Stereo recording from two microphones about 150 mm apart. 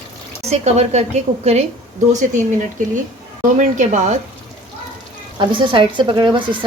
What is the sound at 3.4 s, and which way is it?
Speech, 55° right (ahead or behind).